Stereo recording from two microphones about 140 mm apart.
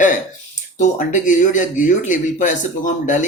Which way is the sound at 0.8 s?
65° left (ahead or behind).